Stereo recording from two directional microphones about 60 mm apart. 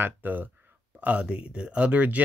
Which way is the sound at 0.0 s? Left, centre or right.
Right.